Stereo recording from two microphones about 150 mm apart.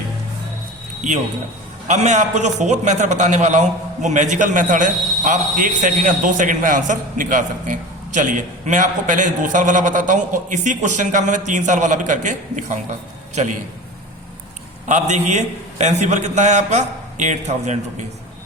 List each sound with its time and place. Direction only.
1.9 s a man's voice: 50° right (ahead or behind)
14.8 s a man's voice: 50° right (ahead or behind)